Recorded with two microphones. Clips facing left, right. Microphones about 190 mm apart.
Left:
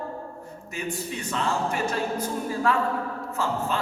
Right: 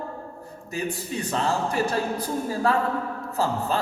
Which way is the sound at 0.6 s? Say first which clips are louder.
Right 2 dB; 35° right (ahead or behind).